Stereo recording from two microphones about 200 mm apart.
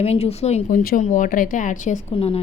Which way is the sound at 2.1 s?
30° left (ahead or behind).